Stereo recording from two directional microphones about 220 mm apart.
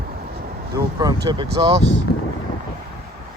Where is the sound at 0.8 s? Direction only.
15° right (ahead or behind).